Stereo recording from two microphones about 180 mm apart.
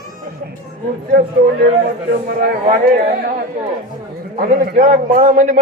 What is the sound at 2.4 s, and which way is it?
Speech, 45° right (ahead or behind).